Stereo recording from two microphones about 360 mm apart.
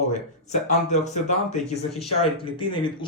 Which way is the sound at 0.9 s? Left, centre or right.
Centre.